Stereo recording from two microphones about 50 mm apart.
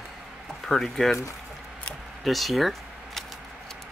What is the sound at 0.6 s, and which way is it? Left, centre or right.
Speech, centre.